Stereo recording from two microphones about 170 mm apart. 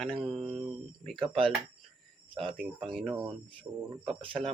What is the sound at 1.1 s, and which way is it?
Speech, 30° right (ahead or behind).